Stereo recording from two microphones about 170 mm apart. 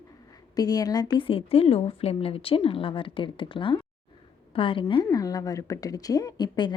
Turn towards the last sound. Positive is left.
turn(degrees=25)  # may be behind; listen again after turning